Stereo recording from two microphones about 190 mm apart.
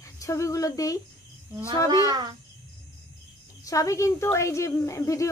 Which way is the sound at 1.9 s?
20° right (ahead or behind).